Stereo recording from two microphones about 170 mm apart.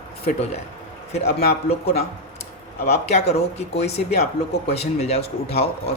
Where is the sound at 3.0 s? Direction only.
40° left (ahead or behind).